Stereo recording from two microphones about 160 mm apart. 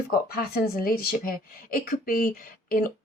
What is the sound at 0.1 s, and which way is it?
Speech, 70° left (ahead or behind).